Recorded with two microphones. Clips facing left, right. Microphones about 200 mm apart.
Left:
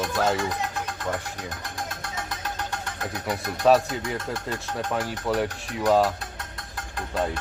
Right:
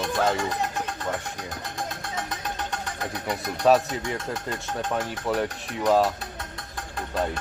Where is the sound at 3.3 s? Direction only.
Centre (ahead or behind).